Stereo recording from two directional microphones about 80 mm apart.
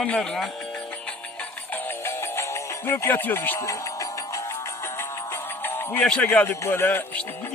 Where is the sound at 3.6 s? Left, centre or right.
Left.